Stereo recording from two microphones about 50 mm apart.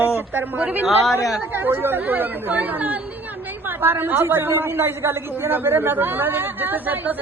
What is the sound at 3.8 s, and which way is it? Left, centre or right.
A man's voice, right.